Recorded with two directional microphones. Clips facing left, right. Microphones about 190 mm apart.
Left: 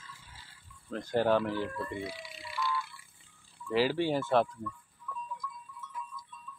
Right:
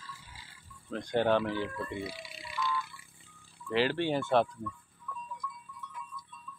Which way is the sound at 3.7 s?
5° left (ahead or behind).